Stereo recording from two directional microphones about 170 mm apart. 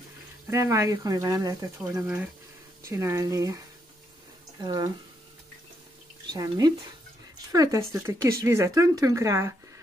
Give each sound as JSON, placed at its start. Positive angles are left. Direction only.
{"t": 0.5, "sound": "speech", "side_deg": -20}
{"t": 6.3, "sound": "speech", "side_deg": -20}